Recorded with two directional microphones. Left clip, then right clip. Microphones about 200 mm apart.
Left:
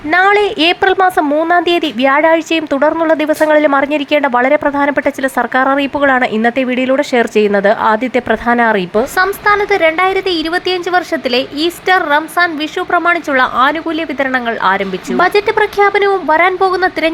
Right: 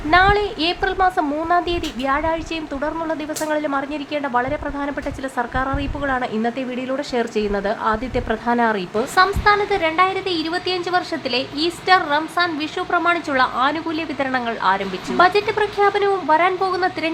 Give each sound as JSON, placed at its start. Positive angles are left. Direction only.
{"t": 0.1, "sound": "a woman's voice", "side_deg": 30}